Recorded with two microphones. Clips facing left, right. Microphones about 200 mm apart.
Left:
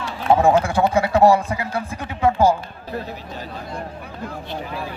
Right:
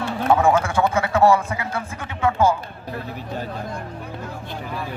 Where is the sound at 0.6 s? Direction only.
35° left (ahead or behind).